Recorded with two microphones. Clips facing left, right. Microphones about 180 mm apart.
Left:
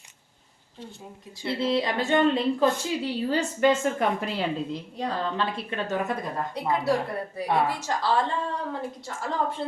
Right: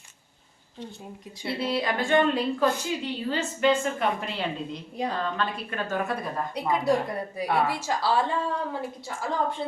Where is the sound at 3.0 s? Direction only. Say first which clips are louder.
Left 3 dB; 40° left (ahead or behind).